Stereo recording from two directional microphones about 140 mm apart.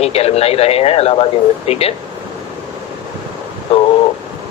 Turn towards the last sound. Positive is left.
turn(degrees=45)  # may be behind; listen again after turning